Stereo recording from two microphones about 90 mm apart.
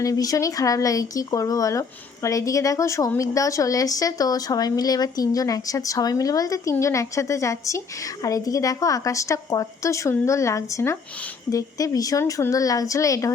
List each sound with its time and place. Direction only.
0.0 s a woman's voice: 40° left (ahead or behind)